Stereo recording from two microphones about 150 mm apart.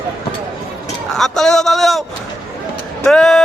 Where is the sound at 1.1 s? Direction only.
Centre (ahead or behind).